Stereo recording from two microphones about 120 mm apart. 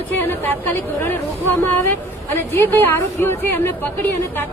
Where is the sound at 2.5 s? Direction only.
20° left (ahead or behind).